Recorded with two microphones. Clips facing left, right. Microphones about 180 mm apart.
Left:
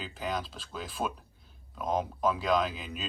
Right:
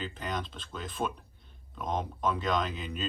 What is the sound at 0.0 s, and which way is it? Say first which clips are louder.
A man's voice: left 1 dB; 5° left (ahead or behind).